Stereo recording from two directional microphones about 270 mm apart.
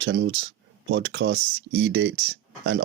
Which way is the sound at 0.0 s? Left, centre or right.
Right.